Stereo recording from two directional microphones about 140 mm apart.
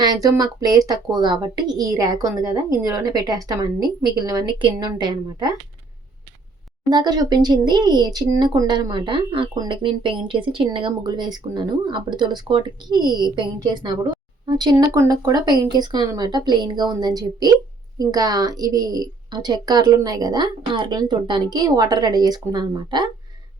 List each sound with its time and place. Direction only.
0.0 s a woman's voice: 30° right (ahead or behind)
6.9 s a woman's voice: 30° right (ahead or behind)